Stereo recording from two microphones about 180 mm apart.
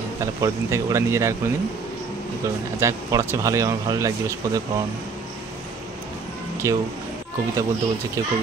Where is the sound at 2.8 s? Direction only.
15° right (ahead or behind).